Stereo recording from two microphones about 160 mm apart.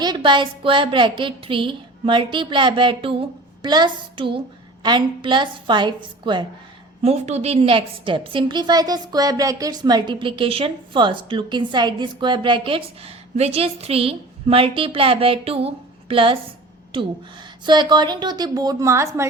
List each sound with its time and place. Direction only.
0.0 s a woman's voice: 30° right (ahead or behind)
7.0 s a woman's voice: 40° right (ahead or behind); by 19.3 s 15° right (ahead or behind)